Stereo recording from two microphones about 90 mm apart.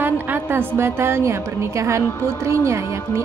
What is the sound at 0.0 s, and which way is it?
A woman's voice, 25° right (ahead or behind).